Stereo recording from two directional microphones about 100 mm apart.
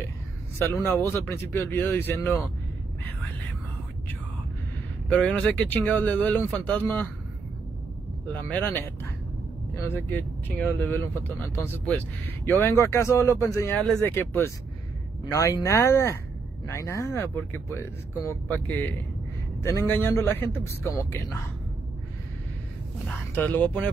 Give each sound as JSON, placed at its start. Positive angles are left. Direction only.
{"t": 0.6, "sound": "speech", "side_deg": 25}
{"t": 5.1, "sound": "speech", "side_deg": 10}
{"t": 8.4, "sound": "speech", "side_deg": 20}
{"t": 9.8, "sound": "speech", "side_deg": 20}
{"t": 15.2, "sound": "speech", "side_deg": 40}
{"t": 23.3, "sound": "speech", "side_deg": 15}